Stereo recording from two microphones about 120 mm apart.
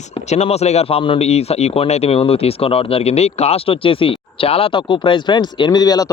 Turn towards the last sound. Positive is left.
turn(degrees=30)  # may be behind; listen again after turning